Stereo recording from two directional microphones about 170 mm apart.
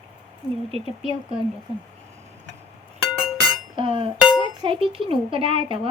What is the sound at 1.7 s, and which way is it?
Speech, 30° right (ahead or behind).